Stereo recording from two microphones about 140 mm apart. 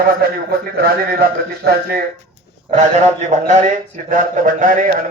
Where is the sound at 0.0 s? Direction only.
90° right.